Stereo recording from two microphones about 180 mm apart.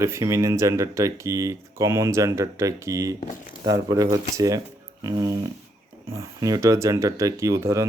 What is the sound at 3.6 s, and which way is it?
Speech, 20° right (ahead or behind).